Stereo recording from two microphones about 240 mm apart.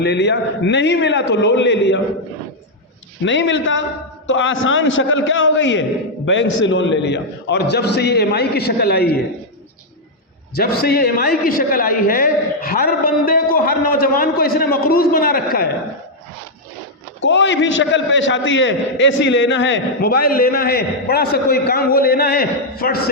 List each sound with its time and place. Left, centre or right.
0.0 s a man's voice: left
3.2 s a man's voice: left
10.5 s a man's voice: left
17.2 s a man's voice: left